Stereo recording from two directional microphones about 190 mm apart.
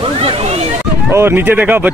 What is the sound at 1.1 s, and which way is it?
Speech, 10° right (ahead or behind).